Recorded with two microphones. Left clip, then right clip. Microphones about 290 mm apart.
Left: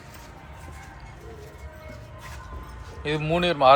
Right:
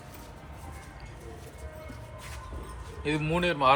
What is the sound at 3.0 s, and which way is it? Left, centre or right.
Speech, left.